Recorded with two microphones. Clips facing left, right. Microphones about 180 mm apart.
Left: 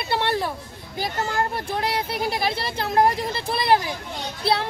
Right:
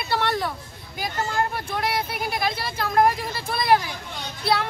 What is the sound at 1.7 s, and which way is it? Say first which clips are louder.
Speech: left 1 dB; 30° left (ahead or behind).